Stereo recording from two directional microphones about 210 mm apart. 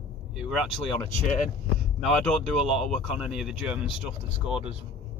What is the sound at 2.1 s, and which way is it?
Speech, centre (ahead or behind).